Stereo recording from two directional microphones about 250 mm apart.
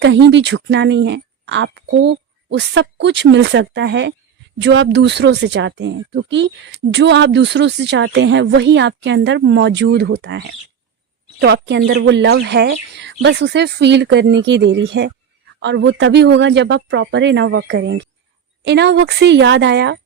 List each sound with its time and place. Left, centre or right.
0.0 s speech: right